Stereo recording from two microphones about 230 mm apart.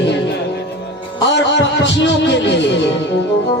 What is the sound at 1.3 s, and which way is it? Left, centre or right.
A man's voice, left.